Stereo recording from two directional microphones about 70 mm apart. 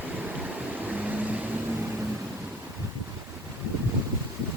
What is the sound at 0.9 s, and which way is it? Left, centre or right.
Vehicle, right.